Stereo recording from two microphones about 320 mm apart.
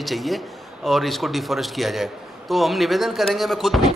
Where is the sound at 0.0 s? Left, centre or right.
Centre.